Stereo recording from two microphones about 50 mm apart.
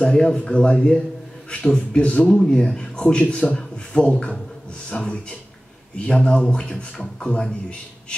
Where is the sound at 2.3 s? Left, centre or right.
Centre.